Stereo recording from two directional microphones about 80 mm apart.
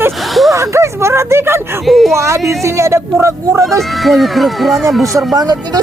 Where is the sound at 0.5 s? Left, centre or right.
Right.